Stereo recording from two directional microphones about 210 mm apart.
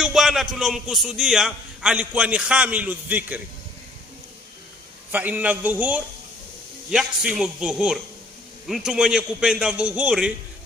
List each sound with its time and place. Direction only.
0.0 s a man's voice: centre (ahead or behind)
5.1 s a man's voice: 5° right (ahead or behind)